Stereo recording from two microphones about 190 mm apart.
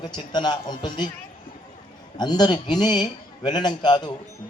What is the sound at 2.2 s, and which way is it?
A man's voice, 20° left (ahead or behind).